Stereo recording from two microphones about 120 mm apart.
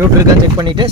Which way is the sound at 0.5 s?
40° right (ahead or behind).